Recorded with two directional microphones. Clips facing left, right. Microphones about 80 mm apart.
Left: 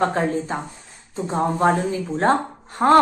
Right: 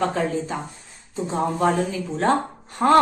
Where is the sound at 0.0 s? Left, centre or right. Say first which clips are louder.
Left 2 dB; left.